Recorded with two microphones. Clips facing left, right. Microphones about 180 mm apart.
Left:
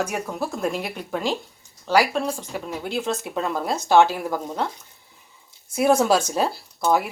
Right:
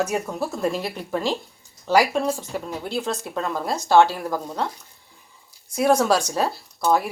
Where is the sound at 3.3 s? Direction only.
15° left (ahead or behind).